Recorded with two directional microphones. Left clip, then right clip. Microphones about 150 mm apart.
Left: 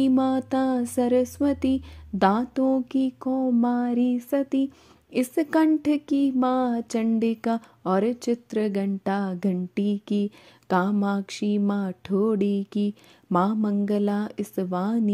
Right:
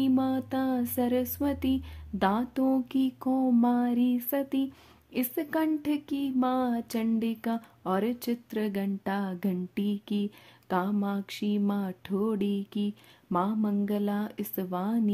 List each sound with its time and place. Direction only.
0.0 s speech: 40° left (ahead or behind)
2.5 s mantra: 20° left (ahead or behind)
5.1 s speech: 40° left (ahead or behind)